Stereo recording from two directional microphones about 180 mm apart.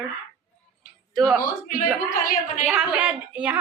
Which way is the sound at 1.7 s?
50° left (ahead or behind).